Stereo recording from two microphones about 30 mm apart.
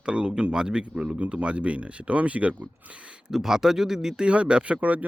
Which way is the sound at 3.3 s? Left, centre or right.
Centre.